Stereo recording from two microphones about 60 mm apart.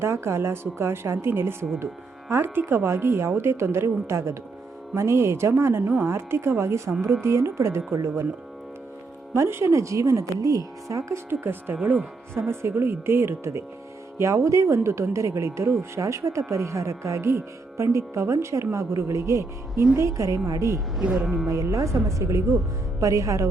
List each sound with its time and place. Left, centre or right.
0.0 s a woman's voice: right
9.3 s speech: right
11.3 s speech: right
12.3 s a woman's voice: right
23.0 s speech: right